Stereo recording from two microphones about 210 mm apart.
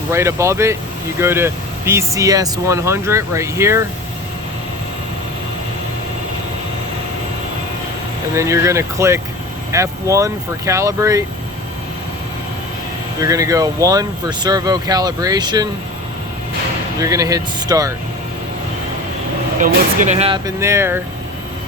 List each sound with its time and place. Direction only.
0.1 s speech: 15° right (ahead or behind)
8.4 s speech: 15° right (ahead or behind)
13.1 s speech: 15° right (ahead or behind)
17.0 s speech: 15° right (ahead or behind)
19.5 s speech: 35° right (ahead or behind)
20.6 s speech: 15° right (ahead or behind)